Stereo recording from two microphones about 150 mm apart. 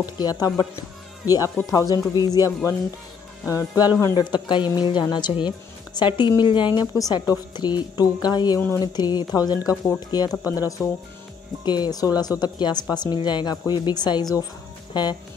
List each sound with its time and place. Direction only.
0.0 s a woman's voice: 25° left (ahead or behind)
8.5 s speech: 15° left (ahead or behind)
8.8 s speech: 30° left (ahead or behind)